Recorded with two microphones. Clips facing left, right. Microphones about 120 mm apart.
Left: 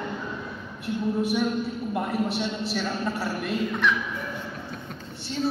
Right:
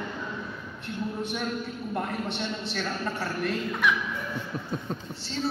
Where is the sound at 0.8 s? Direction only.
5° left (ahead or behind).